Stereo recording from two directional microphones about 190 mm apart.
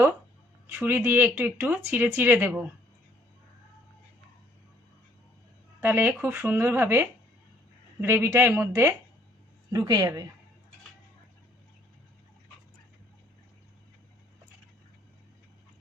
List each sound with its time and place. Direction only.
0.7 s speech: 10° right (ahead or behind)
5.8 s speech: 10° right (ahead or behind)